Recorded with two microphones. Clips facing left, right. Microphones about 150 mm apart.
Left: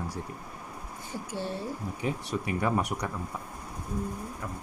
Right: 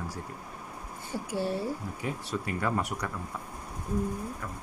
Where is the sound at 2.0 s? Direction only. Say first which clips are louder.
Left 3 dB; 15° left (ahead or behind).